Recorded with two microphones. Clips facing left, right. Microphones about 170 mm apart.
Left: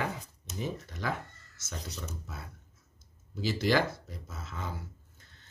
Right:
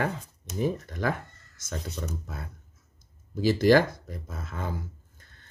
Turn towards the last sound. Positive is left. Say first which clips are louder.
# right 5 dB
turn(degrees=-50)  # may be behind; listen again after turning